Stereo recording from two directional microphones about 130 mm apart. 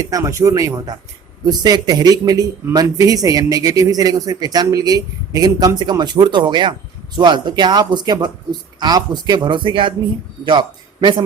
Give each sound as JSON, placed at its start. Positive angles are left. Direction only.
{"t": 0.0, "sound": "a man's voice", "side_deg": -25}